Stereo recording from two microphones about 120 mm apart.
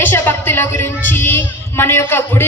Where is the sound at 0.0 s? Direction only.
15° left (ahead or behind).